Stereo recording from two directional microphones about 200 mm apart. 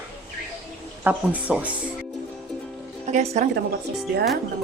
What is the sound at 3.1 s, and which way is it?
Speech, 35° right (ahead or behind).